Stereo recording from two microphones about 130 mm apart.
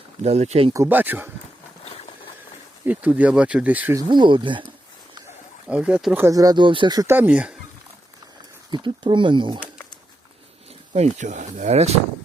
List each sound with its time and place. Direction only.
0.2 s speech: 60° right (ahead or behind)
0.7 s speech: 20° right (ahead or behind)
2.8 s speech: 10° right (ahead or behind)
3.9 s speech: 35° right (ahead or behind)
5.6 s speech: 10° right (ahead or behind)
6.1 s speech: 25° right (ahead or behind)
7.1 s speech: 10° right (ahead or behind)
8.7 s speech: 40° right (ahead or behind)
10.9 s speech: 60° right (ahead or behind)